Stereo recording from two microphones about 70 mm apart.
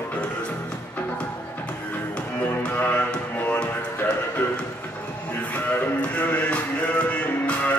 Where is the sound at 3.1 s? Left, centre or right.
Centre.